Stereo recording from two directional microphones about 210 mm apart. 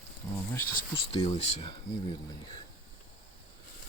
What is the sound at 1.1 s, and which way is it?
Speech, 30° left (ahead or behind).